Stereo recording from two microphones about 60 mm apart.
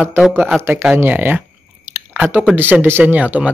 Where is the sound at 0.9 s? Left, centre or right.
Right.